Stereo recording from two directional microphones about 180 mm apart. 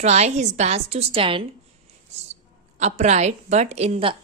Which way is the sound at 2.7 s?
40° right (ahead or behind).